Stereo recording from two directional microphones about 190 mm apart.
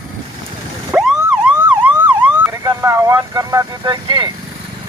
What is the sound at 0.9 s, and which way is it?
Emergency vehicle, 10° right (ahead or behind).